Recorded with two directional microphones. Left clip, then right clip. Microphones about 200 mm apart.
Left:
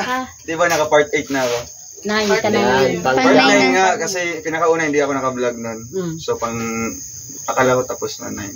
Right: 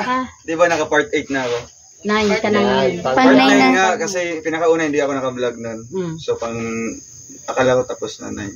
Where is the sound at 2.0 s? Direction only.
50° right (ahead or behind).